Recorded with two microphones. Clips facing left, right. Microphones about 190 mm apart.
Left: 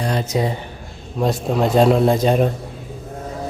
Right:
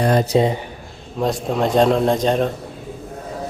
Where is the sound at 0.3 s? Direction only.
25° right (ahead or behind).